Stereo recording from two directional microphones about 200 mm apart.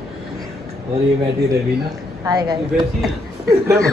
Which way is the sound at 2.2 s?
20° right (ahead or behind).